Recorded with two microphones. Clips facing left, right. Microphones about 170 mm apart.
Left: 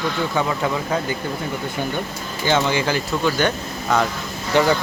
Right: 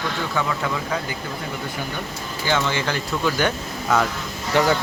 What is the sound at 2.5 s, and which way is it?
Speech, 15° left (ahead or behind).